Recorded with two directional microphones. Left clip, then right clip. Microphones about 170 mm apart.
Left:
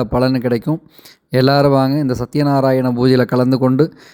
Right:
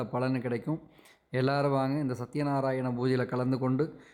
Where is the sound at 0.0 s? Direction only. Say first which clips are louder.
Left 15 dB; 40° left (ahead or behind).